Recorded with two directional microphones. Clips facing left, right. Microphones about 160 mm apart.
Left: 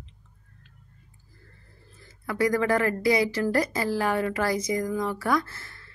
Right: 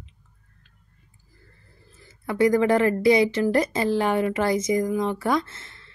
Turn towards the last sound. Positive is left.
turn(degrees=-25)  # may be behind; listen again after turning